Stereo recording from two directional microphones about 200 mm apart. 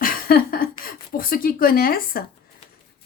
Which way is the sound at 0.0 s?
45° left (ahead or behind).